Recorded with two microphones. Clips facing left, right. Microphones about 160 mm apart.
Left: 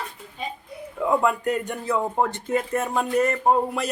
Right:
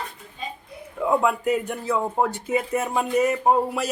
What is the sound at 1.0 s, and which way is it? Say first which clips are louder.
Speech: even; centre (ahead or behind).